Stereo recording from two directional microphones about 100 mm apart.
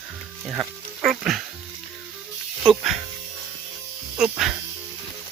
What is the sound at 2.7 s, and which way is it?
Speech, centre (ahead or behind).